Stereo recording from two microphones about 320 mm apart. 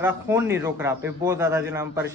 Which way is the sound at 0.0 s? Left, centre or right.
Centre.